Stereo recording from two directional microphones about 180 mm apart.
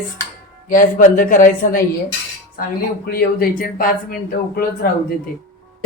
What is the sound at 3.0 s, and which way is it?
Speech, 55° left (ahead or behind).